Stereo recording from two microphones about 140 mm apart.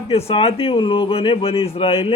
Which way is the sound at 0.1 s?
45° left (ahead or behind).